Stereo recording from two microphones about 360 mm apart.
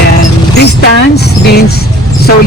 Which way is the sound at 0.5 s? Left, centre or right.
Left.